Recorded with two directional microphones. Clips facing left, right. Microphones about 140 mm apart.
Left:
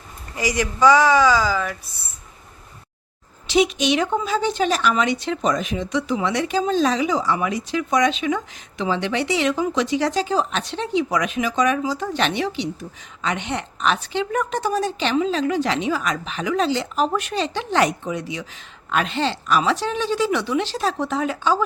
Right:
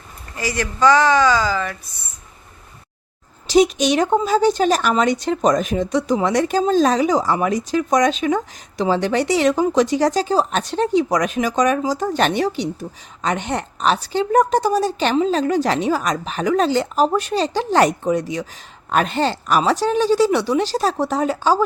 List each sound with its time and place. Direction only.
0.3 s speech: 15° left (ahead or behind)
3.4 s a woman's voice: 40° right (ahead or behind)